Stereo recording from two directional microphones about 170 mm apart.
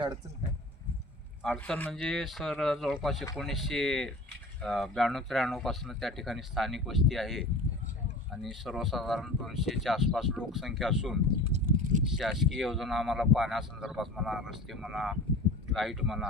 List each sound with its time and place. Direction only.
1.4 s speech: 5° left (ahead or behind)
8.4 s speech: centre (ahead or behind)
11.4 s a sound: 45° right (ahead or behind)
12.1 s speech: centre (ahead or behind)